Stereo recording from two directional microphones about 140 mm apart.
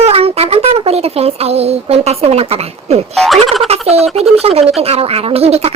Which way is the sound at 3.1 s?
Centre (ahead or behind).